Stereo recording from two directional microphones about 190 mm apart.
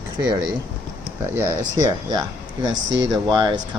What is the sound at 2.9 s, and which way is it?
Speech, 70° right (ahead or behind).